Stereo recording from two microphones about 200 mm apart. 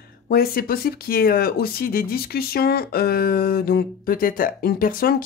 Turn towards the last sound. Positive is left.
turn(degrees=45)  # may be behind; listen again after turning